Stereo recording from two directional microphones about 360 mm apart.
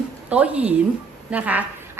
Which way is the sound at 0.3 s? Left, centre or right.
Centre.